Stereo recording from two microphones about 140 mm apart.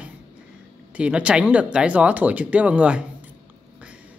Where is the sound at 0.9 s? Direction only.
5° right (ahead or behind).